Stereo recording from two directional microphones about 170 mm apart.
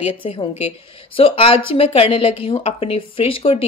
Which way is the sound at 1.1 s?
35° left (ahead or behind).